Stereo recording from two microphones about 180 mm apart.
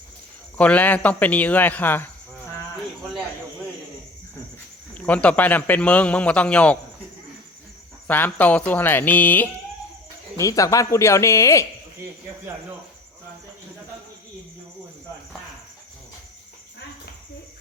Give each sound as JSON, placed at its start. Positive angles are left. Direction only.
{"t": 0.5, "sound": "speech", "side_deg": 10}
{"t": 4.9, "sound": "speech", "side_deg": 10}
{"t": 8.0, "sound": "speech", "side_deg": 10}